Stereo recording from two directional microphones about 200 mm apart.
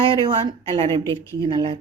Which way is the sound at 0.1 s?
20° right (ahead or behind).